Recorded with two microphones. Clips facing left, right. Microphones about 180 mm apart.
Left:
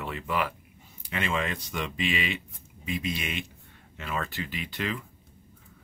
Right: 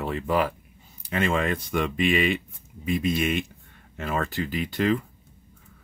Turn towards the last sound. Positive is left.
turn(degrees=-40)  # may be behind; listen again after turning